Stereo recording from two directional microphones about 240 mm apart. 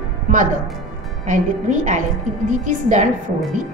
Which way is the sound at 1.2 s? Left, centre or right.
Right.